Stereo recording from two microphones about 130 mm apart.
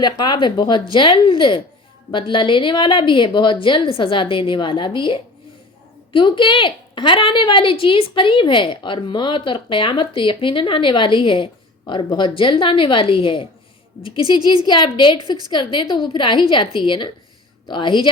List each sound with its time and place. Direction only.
0.0 s a woman's voice: 35° left (ahead or behind)